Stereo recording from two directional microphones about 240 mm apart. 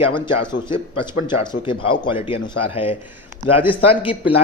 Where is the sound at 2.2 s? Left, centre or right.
Left.